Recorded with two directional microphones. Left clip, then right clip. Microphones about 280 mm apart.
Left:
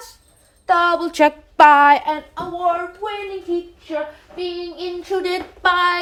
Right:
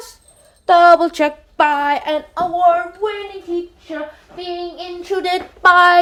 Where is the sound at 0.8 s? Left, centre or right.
Centre.